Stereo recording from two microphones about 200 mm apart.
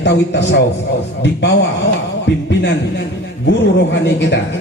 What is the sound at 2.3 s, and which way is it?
Speech, 60° left (ahead or behind).